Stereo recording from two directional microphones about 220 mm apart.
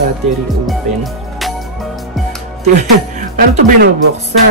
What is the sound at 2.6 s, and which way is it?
Speech, 35° right (ahead or behind).